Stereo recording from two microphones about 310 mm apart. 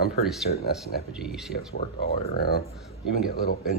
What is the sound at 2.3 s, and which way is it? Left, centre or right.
Speech, left.